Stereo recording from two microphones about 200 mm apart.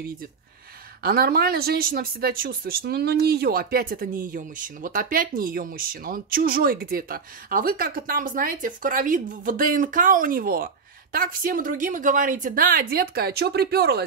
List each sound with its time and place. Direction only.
1.0 s speech: 50° right (ahead or behind)